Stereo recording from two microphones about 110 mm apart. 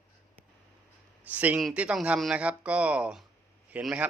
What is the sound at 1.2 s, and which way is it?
Speech, 15° right (ahead or behind).